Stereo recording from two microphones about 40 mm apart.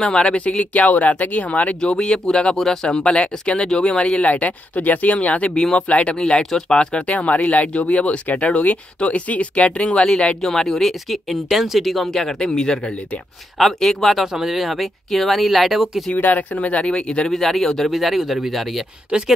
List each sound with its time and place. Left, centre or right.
0.0 s speech: left
1.8 s speech: left
2.5 s speech: centre
4.3 s speech: left
6.1 s speech: left
7.0 s speech: left
10.4 s speech: centre
12.1 s speech: centre
13.6 s speech: centre
14.2 s speech: centre
16.2 s speech: left
17.3 s speech: centre